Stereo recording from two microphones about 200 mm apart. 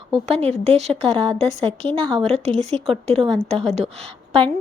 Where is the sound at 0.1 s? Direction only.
30° right (ahead or behind).